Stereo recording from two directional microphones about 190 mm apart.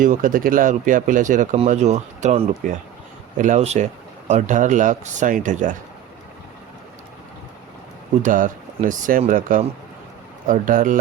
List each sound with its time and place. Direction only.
0.0 s speech: 45° right (ahead or behind)
8.2 s speech: 45° right (ahead or behind)